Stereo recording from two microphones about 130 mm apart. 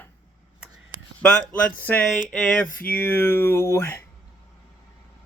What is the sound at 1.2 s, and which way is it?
Speech, 10° left (ahead or behind).